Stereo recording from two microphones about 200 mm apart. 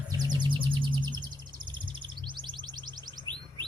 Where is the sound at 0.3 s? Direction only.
25° right (ahead or behind).